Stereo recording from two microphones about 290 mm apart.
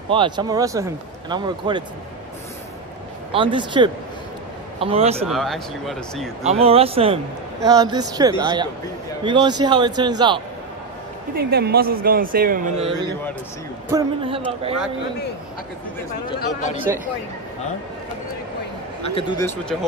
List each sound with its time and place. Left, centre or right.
0.1 s a man's voice: centre
3.3 s a man's voice: centre
5.2 s speech: centre
6.4 s a man's voice: right
11.3 s a man's voice: right
19.0 s speech: centre